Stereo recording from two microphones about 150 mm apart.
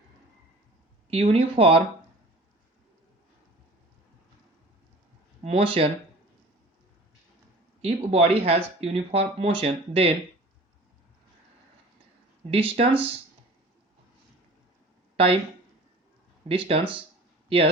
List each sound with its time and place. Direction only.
1.1 s speech: 40° right (ahead or behind)
5.4 s speech: 40° right (ahead or behind)
7.8 s speech: 45° right (ahead or behind)
12.5 s speech: 40° right (ahead or behind)
15.1 s a sound: 40° right (ahead or behind)
16.5 s speech: 40° right (ahead or behind)